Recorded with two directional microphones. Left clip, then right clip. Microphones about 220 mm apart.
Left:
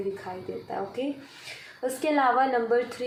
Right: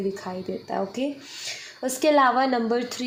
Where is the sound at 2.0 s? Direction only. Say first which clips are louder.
Right 4 dB; 50° right (ahead or behind).